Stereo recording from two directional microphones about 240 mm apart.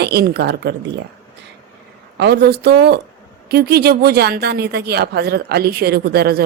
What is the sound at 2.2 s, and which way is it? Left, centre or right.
Speech, right.